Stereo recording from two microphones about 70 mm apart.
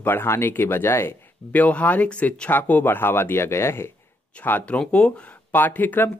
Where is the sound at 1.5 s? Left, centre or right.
Left.